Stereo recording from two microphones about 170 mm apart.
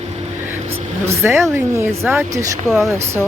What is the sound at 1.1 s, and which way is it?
Speech, 15° right (ahead or behind).